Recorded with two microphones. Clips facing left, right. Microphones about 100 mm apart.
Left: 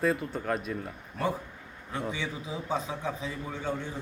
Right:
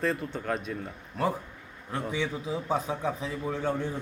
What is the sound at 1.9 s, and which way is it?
Speech, centre (ahead or behind).